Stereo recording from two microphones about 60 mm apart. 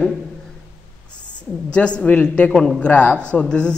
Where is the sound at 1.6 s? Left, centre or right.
Centre.